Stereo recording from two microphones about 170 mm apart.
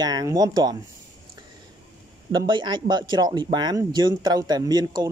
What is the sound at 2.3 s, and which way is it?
Speech, 25° right (ahead or behind).